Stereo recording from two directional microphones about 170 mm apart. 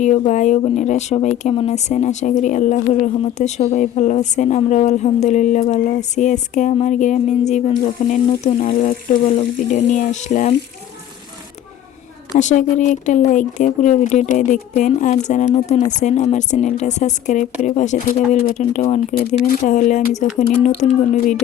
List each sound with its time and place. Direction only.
0.0 s speech: 45° left (ahead or behind)
9.2 s speech: 35° left (ahead or behind)
9.9 s speech: 45° left (ahead or behind)
12.4 s speech: 45° left (ahead or behind)